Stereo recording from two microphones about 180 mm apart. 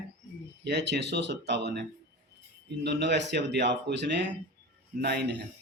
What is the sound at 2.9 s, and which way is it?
A man's voice, 70° right (ahead or behind).